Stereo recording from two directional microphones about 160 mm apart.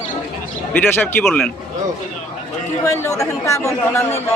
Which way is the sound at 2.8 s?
20° left (ahead or behind).